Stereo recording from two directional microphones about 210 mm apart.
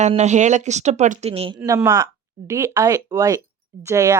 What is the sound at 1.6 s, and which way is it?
Speech, 10° right (ahead or behind).